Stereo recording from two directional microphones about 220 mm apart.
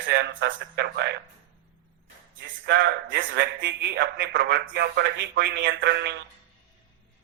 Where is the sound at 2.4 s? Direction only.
50° right (ahead or behind).